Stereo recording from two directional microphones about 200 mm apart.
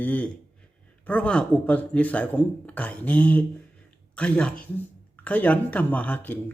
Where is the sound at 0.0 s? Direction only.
10° left (ahead or behind).